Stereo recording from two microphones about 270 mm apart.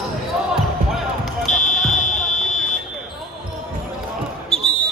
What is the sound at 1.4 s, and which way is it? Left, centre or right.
Fire alarm, left.